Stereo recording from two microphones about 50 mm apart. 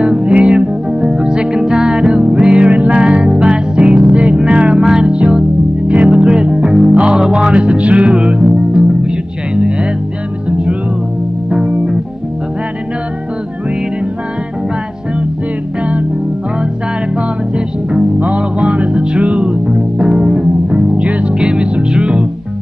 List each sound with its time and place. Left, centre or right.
0.0 s music: centre
11.5 s music: centre
17.6 s music: right
21.0 s music: right